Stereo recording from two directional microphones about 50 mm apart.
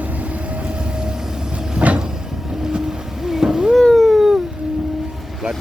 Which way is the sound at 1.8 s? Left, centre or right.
Centre.